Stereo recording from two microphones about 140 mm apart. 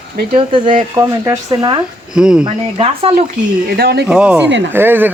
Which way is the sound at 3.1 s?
75° right (ahead or behind).